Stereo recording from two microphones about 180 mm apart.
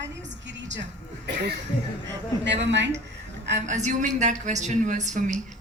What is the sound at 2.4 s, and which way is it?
Speech, 85° right.